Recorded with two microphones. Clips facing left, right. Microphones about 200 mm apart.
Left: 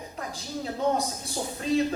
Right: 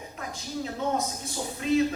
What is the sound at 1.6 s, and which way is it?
Speech, 35° left (ahead or behind).